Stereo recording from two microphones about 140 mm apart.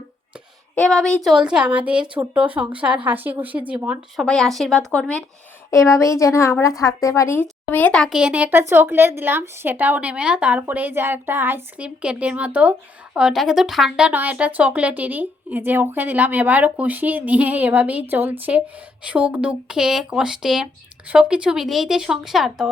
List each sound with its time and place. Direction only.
0.8 s speech: 5° left (ahead or behind); by 3.9 s 10° right (ahead or behind)
4.2 s speech: 5° left (ahead or behind)
5.7 s speech: 20° left (ahead or behind)
8.1 s speech: 10° right (ahead or behind)